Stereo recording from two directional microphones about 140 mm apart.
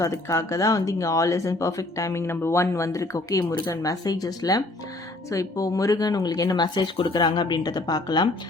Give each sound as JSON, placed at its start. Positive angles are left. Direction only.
{"t": 0.0, "sound": "speech", "side_deg": 20}